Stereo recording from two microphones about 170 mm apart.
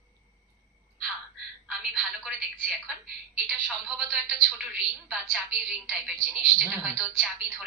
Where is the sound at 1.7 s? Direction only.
Centre (ahead or behind).